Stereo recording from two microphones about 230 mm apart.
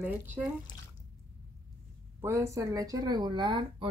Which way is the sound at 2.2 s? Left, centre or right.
Centre.